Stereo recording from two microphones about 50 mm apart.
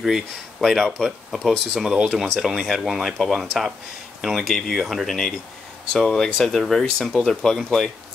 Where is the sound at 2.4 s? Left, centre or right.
Centre.